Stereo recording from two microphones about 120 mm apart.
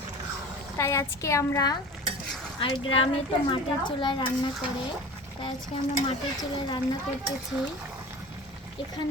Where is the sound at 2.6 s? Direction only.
45° left (ahead or behind).